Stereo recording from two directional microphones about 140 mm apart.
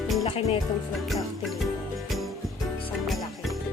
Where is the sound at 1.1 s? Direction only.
Centre (ahead or behind).